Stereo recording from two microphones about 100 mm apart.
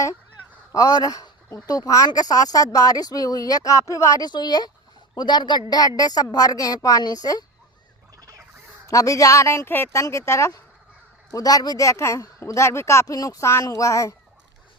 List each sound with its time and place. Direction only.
0.7 s speech: 35° left (ahead or behind)
8.9 s speech: 35° left (ahead or behind)